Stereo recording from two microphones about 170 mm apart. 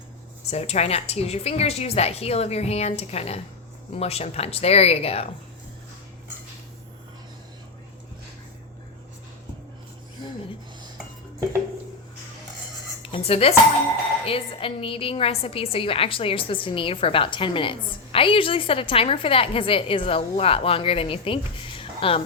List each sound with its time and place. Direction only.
0.4 s a woman's voice: 40° left (ahead or behind)
13.0 s a sound: 35° left (ahead or behind)
14.3 s a woman's voice: 35° left (ahead or behind)